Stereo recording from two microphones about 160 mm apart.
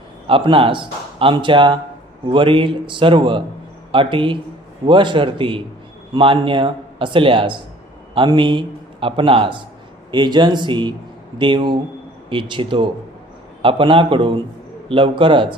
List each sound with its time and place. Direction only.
0.3 s a man's voice: 35° right (ahead or behind)